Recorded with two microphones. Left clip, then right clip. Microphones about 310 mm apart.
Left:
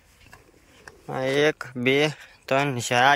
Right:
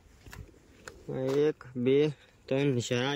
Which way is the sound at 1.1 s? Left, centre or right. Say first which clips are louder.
Left 6 dB; left.